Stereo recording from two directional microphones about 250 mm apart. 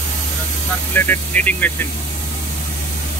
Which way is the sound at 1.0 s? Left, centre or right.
Centre.